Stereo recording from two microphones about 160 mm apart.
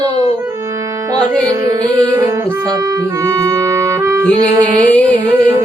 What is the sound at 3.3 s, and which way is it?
Music, 20° right (ahead or behind).